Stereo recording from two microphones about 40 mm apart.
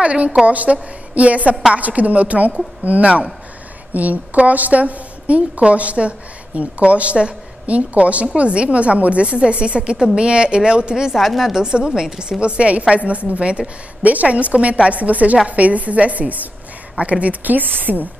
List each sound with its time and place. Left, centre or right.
0.0 s a woman's voice: right
11.1 s speech: centre
11.5 s a woman's voice: right
14.0 s a woman's voice: right